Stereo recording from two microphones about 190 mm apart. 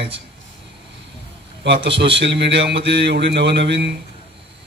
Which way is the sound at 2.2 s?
65° right (ahead or behind).